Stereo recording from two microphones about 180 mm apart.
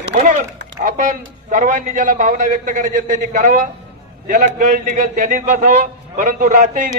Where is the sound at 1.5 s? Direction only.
45° right (ahead or behind).